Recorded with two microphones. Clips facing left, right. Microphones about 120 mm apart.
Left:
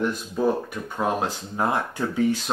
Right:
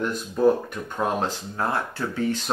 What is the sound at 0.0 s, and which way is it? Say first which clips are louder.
Speech: right 3 dB; 5° left (ahead or behind).